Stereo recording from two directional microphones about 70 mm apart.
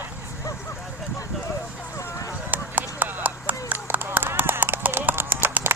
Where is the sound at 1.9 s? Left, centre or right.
Left.